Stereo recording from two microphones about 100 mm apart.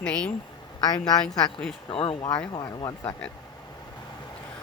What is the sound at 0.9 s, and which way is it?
Speech, 40° left (ahead or behind).